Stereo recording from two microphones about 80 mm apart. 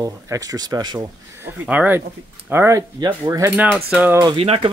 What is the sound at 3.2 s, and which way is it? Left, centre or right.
Speech, right.